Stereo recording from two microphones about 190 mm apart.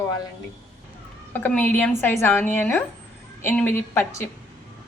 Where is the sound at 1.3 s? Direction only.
10° left (ahead or behind).